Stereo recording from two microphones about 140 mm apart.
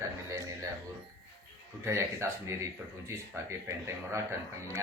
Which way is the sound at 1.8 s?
20° right (ahead or behind).